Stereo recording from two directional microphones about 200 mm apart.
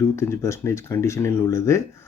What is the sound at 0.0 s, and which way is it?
Speech, 15° left (ahead or behind).